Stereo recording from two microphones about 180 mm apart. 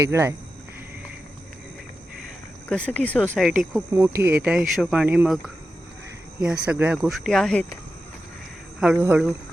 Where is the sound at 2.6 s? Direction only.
5° left (ahead or behind).